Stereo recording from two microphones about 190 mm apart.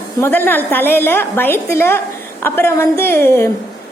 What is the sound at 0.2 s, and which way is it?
A woman's voice, 10° left (ahead or behind).